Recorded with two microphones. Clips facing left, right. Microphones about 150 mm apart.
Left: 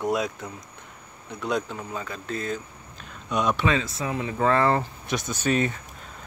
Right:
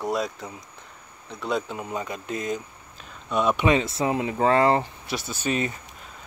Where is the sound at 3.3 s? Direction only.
Centre (ahead or behind).